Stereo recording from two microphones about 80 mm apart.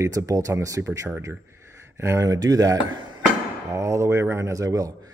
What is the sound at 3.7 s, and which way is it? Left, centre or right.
Speech, right.